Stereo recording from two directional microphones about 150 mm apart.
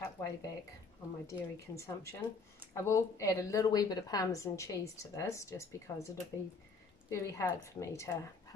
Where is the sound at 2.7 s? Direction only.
20° left (ahead or behind).